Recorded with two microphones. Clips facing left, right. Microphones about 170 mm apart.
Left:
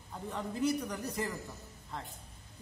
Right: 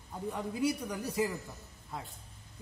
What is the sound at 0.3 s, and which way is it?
A man's voice, 10° right (ahead or behind).